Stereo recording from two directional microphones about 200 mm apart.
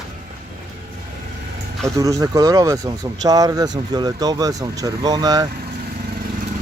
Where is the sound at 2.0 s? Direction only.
15° right (ahead or behind).